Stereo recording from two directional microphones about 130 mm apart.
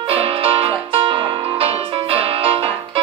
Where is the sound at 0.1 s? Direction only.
45° right (ahead or behind).